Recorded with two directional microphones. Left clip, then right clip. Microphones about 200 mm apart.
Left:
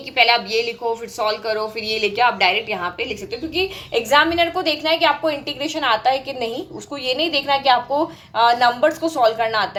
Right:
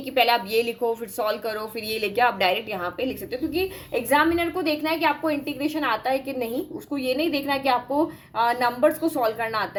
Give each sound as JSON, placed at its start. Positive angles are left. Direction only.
{"t": 0.2, "sound": "a woman's voice", "side_deg": -35}